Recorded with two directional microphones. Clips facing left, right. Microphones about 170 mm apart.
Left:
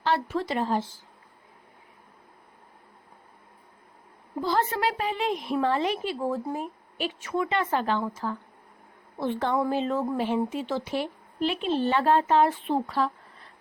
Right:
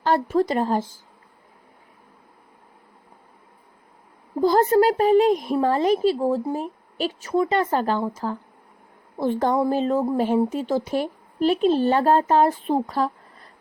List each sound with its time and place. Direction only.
0.0 s speech: 45° right (ahead or behind)
4.4 s speech: 40° right (ahead or behind)